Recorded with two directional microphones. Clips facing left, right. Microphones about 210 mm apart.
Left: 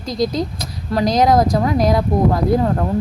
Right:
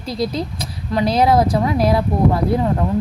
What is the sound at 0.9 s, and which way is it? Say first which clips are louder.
A woman's voice: left 1 dB; 5° right (ahead or behind).